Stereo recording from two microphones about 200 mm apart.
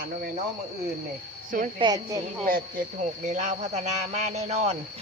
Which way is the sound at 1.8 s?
20° right (ahead or behind).